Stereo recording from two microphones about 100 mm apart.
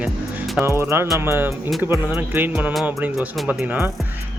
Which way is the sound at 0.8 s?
25° right (ahead or behind).